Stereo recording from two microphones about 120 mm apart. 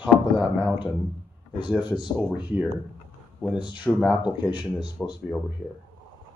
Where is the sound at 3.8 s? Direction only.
Centre (ahead or behind).